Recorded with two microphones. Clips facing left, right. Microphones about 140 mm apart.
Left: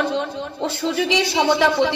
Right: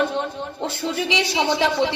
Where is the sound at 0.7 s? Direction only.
15° right (ahead or behind).